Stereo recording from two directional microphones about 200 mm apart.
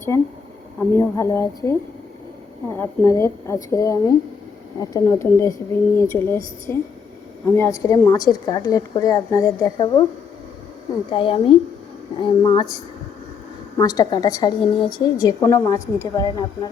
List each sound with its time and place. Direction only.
0.1 s speech: 15° left (ahead or behind)
2.7 s a woman's voice: 10° left (ahead or behind)
11.1 s a woman's voice: 25° left (ahead or behind)
13.7 s a woman's voice: 20° left (ahead or behind)